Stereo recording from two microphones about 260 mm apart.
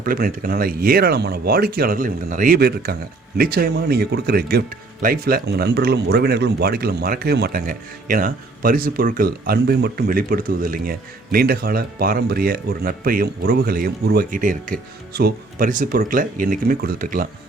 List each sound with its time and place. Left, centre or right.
0.0 s speech: right